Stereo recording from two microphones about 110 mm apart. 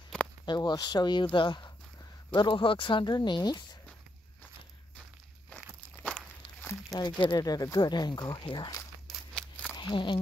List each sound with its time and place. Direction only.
0.5 s speech: 40° left (ahead or behind)
6.0 s walk: 5° left (ahead or behind)
7.0 s speech: 40° left (ahead or behind)